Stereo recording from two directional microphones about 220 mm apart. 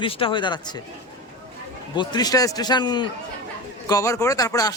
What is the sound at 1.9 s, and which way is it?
A man's voice, 20° left (ahead or behind).